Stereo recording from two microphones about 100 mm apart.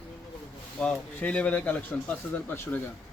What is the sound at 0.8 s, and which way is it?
Speech, 10° left (ahead or behind).